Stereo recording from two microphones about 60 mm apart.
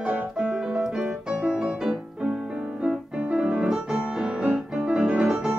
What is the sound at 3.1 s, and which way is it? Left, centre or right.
Piano, right.